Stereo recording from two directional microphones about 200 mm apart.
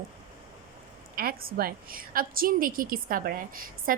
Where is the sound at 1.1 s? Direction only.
50° right (ahead or behind).